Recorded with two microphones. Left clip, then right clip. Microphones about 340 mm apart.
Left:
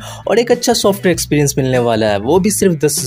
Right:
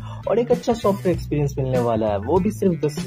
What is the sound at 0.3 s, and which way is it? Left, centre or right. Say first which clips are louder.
Speech: left 7 dB; left.